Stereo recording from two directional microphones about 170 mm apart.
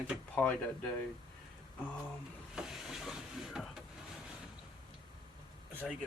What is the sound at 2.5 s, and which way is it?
Stir, centre (ahead or behind).